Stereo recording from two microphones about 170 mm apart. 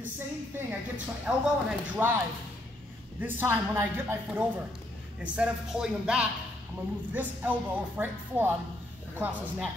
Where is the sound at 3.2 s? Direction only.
10° right (ahead or behind).